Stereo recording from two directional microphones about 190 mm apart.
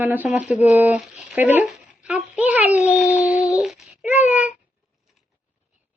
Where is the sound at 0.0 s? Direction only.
10° right (ahead or behind).